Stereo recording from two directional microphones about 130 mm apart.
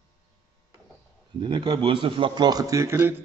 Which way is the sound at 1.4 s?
35° right (ahead or behind).